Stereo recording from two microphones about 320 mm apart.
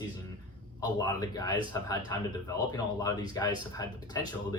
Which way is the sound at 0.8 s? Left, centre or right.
Centre.